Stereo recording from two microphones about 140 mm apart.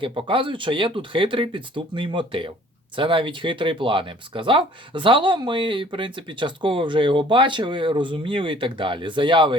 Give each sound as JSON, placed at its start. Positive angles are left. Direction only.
{"t": 0.0, "sound": "speech", "side_deg": -40}